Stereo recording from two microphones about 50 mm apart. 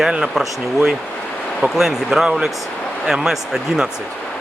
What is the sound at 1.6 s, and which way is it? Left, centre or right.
Speech, centre.